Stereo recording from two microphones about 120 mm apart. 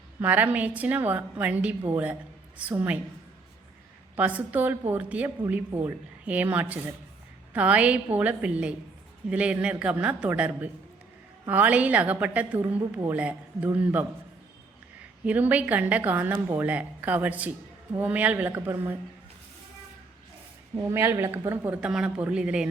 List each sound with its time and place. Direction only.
0.2 s a woman's voice: 15° right (ahead or behind)
4.1 s a woman's voice: 15° right (ahead or behind)
15.2 s a woman's voice: 15° right (ahead or behind)
20.7 s a woman's voice: 20° right (ahead or behind)